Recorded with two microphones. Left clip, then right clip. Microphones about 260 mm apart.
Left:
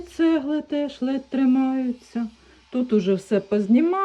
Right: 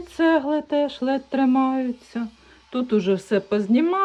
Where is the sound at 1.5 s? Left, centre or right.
Centre.